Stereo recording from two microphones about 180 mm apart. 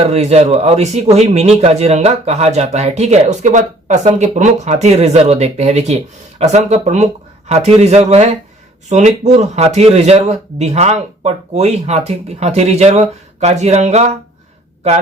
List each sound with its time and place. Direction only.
0.0 s speech: 35° right (ahead or behind)